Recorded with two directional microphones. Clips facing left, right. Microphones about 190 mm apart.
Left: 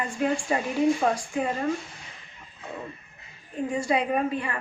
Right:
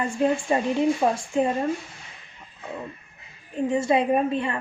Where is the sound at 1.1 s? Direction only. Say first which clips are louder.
Right 4 dB; 25° right (ahead or behind).